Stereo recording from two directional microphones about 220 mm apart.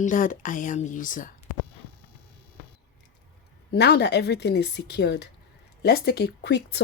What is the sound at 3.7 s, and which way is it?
Speech, 50° left (ahead or behind).